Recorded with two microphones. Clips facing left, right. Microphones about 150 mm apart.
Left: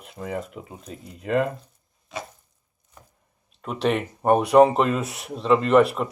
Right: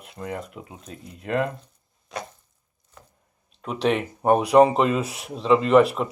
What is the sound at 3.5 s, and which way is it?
Speech, centre (ahead or behind).